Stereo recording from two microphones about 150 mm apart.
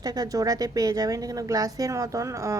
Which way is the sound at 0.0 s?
25° right (ahead or behind).